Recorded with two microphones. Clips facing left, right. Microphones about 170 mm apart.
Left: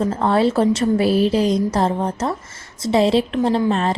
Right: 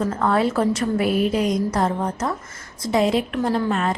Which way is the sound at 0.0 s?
25° left (ahead or behind).